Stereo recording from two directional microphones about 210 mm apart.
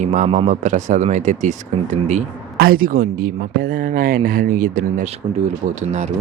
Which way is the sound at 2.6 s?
45° right (ahead or behind).